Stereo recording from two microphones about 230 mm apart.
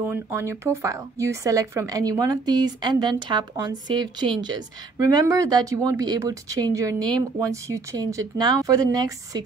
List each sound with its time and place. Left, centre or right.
0.0 s speech: centre